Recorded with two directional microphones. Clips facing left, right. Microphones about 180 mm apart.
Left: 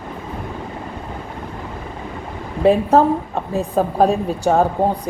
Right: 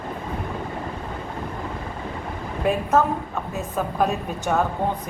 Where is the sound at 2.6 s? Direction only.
30° left (ahead or behind).